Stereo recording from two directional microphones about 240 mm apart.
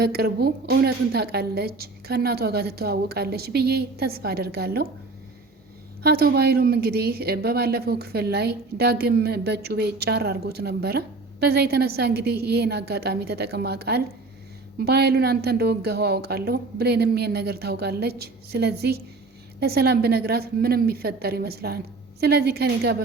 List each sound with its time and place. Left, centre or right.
0.0 s speech: right
6.0 s a woman's voice: right